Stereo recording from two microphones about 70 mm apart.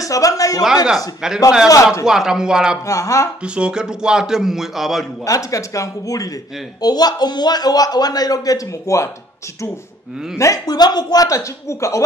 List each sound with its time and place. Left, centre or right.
0.0 s speech: left
0.8 s a man's voice: centre
2.9 s speech: left
3.4 s a man's voice: centre
5.2 s speech: left
6.8 s a man's voice: left
10.3 s speech: left
10.7 s a man's voice: left
11.2 s speech: left